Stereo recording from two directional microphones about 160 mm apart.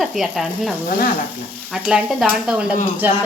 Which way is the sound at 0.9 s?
65° left (ahead or behind).